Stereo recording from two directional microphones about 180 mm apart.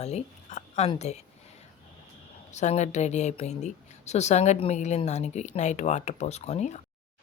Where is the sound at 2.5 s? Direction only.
40° left (ahead or behind).